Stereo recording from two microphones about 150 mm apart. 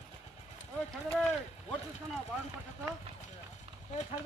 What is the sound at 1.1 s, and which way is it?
Speech, 10° left (ahead or behind).